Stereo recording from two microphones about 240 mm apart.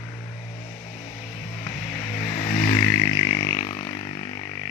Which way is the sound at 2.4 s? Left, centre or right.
Left.